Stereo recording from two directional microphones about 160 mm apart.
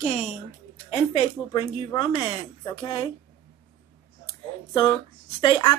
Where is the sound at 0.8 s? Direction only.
40° left (ahead or behind).